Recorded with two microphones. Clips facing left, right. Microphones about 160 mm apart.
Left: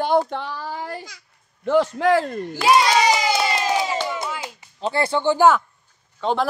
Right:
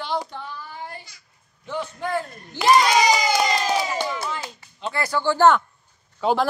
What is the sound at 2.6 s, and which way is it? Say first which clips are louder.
Speech: even; 10° left (ahead or behind).